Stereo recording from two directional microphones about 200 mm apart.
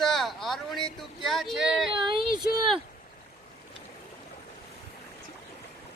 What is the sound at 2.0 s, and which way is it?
Female singing, 25° right (ahead or behind).